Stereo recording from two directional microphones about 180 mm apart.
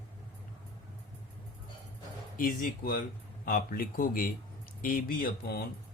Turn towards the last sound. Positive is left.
turn(degrees=50)  # may be behind; listen again after turning